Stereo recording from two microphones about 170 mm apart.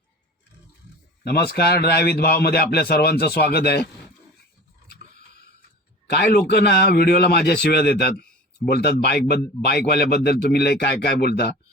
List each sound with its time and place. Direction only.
1.2 s a man's voice: 65° left (ahead or behind)
6.1 s a man's voice: 70° left (ahead or behind)